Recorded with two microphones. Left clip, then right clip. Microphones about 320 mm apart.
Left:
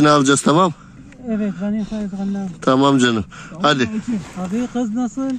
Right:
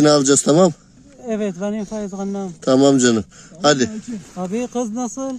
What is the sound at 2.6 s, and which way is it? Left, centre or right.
Speech, centre.